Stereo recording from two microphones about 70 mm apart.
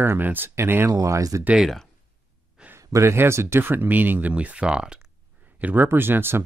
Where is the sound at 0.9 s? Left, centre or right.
Right.